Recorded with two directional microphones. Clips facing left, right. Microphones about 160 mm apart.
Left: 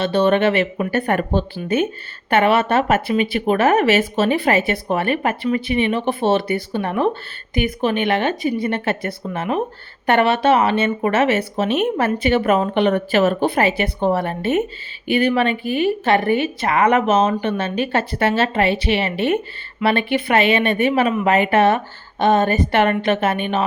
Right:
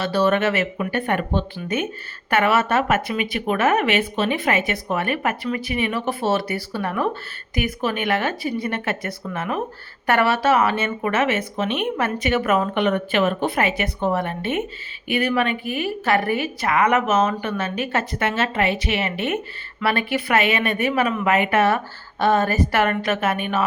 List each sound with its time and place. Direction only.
0.0 s speech: 25° left (ahead or behind)